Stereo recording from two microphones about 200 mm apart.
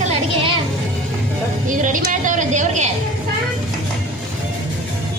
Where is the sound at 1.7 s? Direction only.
40° right (ahead or behind).